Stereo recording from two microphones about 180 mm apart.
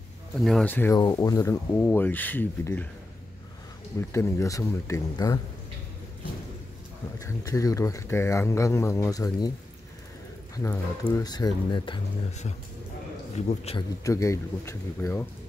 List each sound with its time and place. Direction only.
0.4 s speech: 5° left (ahead or behind)
0.9 s speech: 20° left (ahead or behind)
4.1 s speech: 15° left (ahead or behind)
7.2 s speech: 15° left (ahead or behind)
10.5 s speech: 20° left (ahead or behind)
13.5 s speech: 35° left (ahead or behind)
14.0 s speech: 15° left (ahead or behind)